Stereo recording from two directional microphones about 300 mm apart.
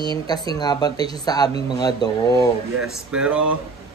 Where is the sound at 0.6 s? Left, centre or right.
Centre.